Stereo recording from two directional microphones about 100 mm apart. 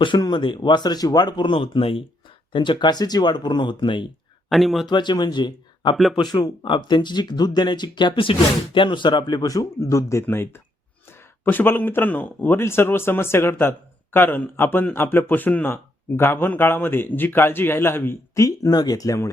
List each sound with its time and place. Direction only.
0.2 s speech: 50° left (ahead or behind); by 2.0 s 65° left (ahead or behind)
2.5 s speech: 55° left (ahead or behind)
4.4 s speech: centre (ahead or behind)
4.9 s speech: 50° left (ahead or behind)